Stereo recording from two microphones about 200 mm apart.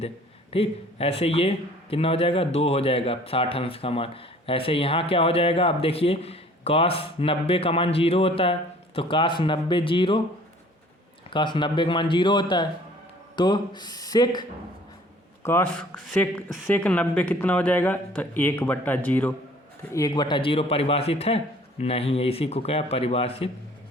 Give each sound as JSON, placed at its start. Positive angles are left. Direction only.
{"t": 0.5, "sound": "a man's voice", "side_deg": 30}
{"t": 11.3, "sound": "a man's voice", "side_deg": 25}
{"t": 15.4, "sound": "a man's voice", "side_deg": 10}